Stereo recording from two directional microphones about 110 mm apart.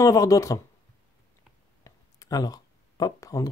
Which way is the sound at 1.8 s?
35° left (ahead or behind).